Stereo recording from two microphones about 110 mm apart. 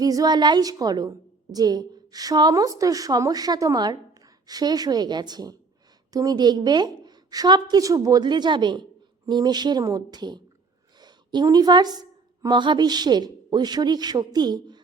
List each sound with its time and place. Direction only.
0.0 s a woman's voice: 35° right (ahead or behind)